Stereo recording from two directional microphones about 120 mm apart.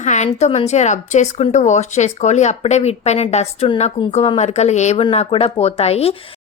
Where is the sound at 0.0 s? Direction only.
80° left.